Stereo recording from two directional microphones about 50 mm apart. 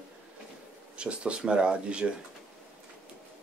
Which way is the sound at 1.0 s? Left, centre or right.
Right.